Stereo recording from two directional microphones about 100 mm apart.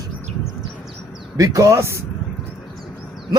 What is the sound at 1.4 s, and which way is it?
Speech, 35° right (ahead or behind).